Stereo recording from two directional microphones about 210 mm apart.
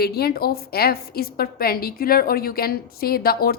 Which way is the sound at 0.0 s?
50° left (ahead or behind).